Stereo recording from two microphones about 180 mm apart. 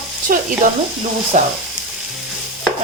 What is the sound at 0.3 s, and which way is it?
Speech, 50° right (ahead or behind).